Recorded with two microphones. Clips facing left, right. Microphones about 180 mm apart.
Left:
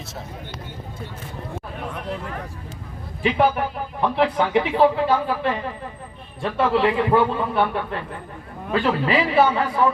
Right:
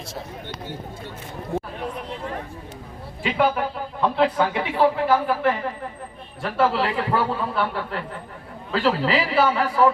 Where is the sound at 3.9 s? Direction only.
25° left (ahead or behind).